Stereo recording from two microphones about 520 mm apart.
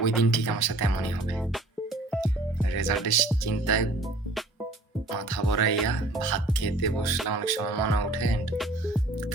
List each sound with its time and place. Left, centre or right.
0.3 s music: left
1.4 s music: centre
2.7 s music: left
5.1 s music: left